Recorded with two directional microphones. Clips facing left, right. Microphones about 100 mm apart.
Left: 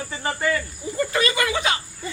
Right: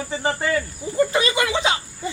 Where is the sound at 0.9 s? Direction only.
20° right (ahead or behind).